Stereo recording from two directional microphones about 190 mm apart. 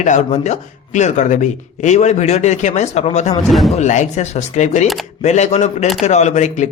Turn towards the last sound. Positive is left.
turn(degrees=40)  # may be behind; listen again after turning